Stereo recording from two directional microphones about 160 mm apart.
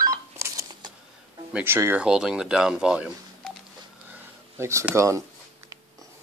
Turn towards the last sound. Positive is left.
turn(degrees=-20)  # may be behind; listen again after turning